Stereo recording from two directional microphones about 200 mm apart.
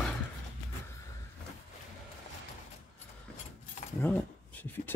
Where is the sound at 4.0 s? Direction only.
10° left (ahead or behind).